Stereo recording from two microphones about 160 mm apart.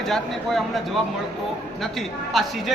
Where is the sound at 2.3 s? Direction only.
Centre (ahead or behind).